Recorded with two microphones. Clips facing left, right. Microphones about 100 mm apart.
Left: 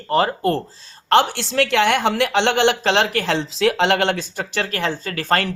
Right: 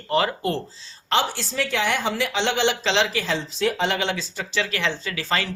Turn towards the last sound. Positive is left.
turn(degrees=55)  # may be behind; listen again after turning